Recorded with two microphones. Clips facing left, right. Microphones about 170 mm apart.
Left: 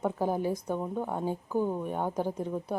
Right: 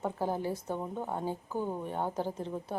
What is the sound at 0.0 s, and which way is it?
A woman's voice, 15° left (ahead or behind).